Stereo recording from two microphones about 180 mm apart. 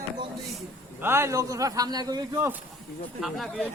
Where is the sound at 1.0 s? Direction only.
15° right (ahead or behind).